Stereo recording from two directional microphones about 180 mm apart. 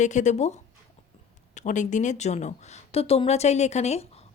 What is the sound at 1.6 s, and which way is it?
Speech, 45° left (ahead or behind).